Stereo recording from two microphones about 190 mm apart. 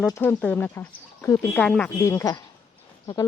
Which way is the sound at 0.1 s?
10° left (ahead or behind).